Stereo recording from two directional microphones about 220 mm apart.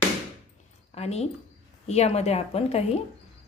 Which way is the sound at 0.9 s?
30° left (ahead or behind).